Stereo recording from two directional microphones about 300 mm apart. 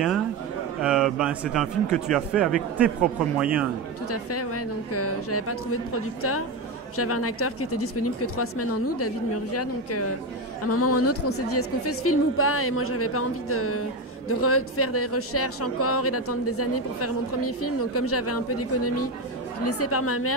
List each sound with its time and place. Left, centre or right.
0.8 s speech: centre
4.1 s speech: left
7.0 s speech: left